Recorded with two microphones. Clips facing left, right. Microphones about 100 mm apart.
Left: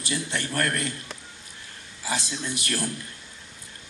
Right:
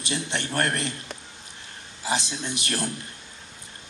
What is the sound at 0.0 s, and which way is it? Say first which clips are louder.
Speech: even; 20° right (ahead or behind).